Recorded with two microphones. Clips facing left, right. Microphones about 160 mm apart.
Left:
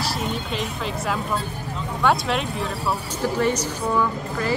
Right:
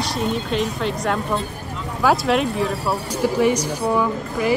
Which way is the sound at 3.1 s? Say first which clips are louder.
Right 5 dB; 10° right (ahead or behind).